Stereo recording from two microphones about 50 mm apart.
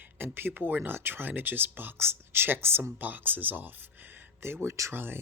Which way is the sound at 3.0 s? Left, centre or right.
Right.